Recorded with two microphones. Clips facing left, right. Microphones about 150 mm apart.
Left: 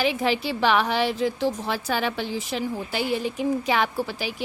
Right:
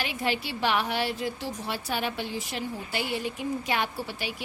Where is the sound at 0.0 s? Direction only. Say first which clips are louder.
Left 7 dB; 90° left.